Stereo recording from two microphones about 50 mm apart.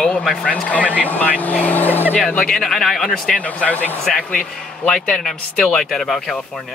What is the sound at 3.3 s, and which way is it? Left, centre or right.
Speech, left.